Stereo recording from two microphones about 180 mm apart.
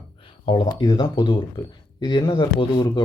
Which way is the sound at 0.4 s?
25° left (ahead or behind).